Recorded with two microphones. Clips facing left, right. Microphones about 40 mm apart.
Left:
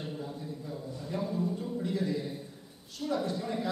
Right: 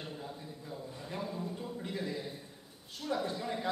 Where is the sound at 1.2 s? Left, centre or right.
Centre.